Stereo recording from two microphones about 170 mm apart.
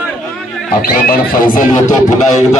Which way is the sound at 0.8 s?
60° left (ahead or behind).